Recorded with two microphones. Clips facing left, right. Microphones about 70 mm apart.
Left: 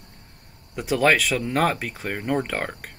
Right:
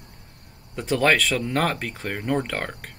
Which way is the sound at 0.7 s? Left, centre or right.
Centre.